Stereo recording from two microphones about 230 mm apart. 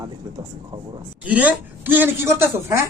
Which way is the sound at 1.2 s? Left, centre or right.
Centre.